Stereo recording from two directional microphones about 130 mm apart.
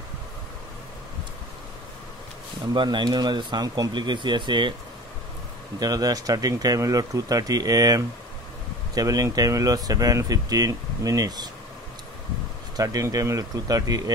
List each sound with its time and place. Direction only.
2.7 s speech: 35° right (ahead or behind)
5.8 s speech: 30° right (ahead or behind)
12.7 s speech: 25° right (ahead or behind)